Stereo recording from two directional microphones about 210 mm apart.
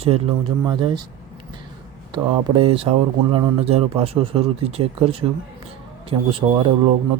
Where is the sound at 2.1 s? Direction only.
25° right (ahead or behind).